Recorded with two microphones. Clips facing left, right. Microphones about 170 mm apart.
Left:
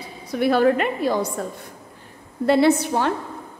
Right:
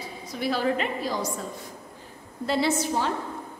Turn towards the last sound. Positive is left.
turn(degrees=60)  # may be behind; listen again after turning